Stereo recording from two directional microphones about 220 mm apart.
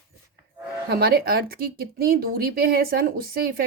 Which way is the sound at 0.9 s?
45° right (ahead or behind).